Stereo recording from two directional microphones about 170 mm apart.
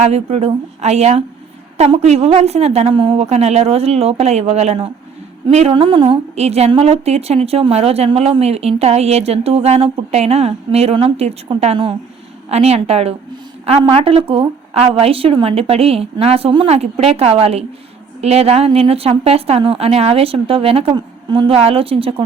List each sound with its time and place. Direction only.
0.0 s a woman's voice: 40° right (ahead or behind)